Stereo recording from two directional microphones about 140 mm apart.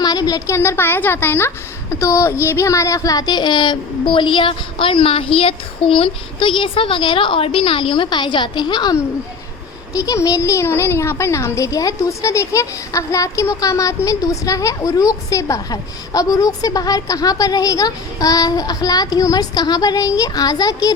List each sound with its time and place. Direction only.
0.0 s a woman's voice: 30° left (ahead or behind)